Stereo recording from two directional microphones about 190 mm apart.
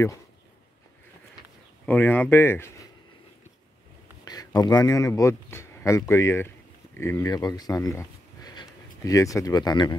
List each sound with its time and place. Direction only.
1.9 s speech: 10° left (ahead or behind)
4.2 s speech: 20° left (ahead or behind)